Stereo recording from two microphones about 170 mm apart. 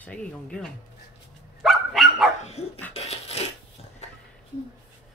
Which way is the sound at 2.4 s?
40° left (ahead or behind).